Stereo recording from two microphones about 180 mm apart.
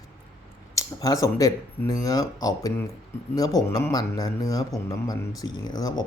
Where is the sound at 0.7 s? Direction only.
20° left (ahead or behind).